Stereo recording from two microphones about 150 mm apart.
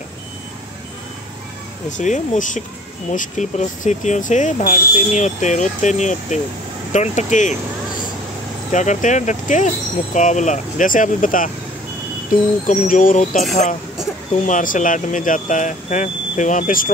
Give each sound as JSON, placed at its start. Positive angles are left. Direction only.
{"t": 1.9, "sound": "speech", "side_deg": 55}
{"t": 8.7, "sound": "speech", "side_deg": 55}
{"t": 14.4, "sound": "speech", "side_deg": 60}